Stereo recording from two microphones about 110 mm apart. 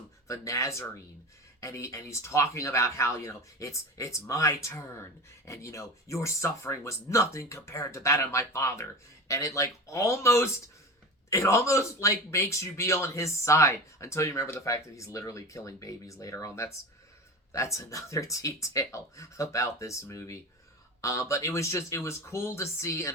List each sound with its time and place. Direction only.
0.3 s speech: 30° left (ahead or behind)